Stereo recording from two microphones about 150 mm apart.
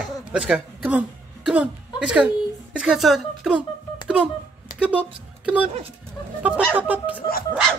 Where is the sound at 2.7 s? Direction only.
5° right (ahead or behind).